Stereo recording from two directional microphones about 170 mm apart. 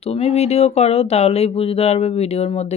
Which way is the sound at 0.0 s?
40° left (ahead or behind).